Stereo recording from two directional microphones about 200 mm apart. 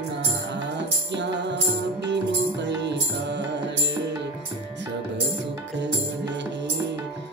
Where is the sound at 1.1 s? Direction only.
60° right (ahead or behind).